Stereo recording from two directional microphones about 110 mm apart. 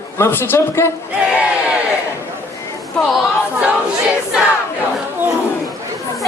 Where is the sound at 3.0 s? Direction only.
5° left (ahead or behind).